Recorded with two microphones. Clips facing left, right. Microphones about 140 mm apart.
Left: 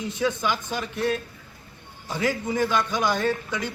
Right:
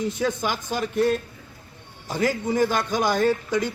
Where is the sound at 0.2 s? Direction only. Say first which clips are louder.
Even; 45° right (ahead or behind).